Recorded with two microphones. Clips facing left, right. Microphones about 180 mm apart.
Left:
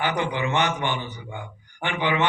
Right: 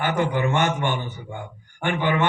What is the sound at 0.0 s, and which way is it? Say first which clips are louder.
Speech: right 3 dB; 50° right (ahead or behind).